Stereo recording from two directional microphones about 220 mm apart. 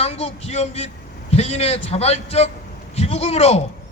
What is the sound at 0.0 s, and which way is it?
A man's voice, 30° left (ahead or behind).